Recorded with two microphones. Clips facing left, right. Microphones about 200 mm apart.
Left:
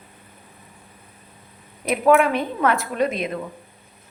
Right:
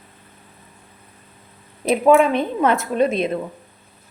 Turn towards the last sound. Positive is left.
turn(degrees=-25)  # may be behind; listen again after turning